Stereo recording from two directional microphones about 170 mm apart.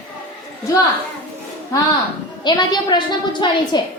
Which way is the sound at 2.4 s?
25° left (ahead or behind).